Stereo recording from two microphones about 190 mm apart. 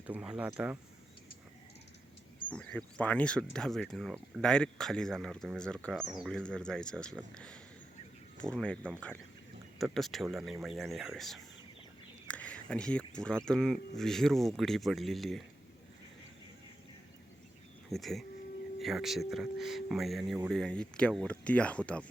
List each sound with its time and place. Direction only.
0.1 s speech: 5° right (ahead or behind)
2.5 s speech: 5° left (ahead or behind)
12.3 s a sound: 5° left (ahead or behind)
13.1 s speech: 5° left (ahead or behind)
17.8 s speech: centre (ahead or behind)